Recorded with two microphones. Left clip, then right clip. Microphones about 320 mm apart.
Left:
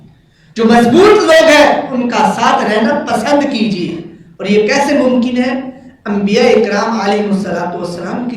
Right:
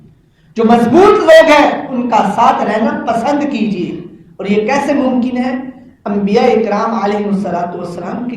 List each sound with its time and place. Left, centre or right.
0.6 s speech: centre